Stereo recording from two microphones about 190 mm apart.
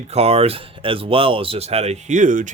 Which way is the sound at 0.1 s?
35° right (ahead or behind).